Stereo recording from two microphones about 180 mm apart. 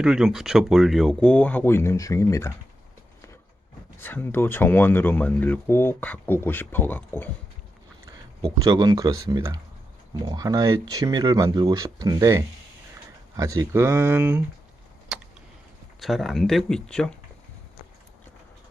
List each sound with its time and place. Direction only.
0.0 s speech: 5° right (ahead or behind); by 2.5 s 15° left (ahead or behind)
4.0 s speech: 10° left (ahead or behind)
8.5 s speech: 20° right (ahead or behind)
16.0 s speech: centre (ahead or behind)